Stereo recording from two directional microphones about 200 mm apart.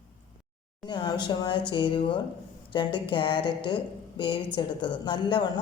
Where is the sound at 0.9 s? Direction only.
20° left (ahead or behind).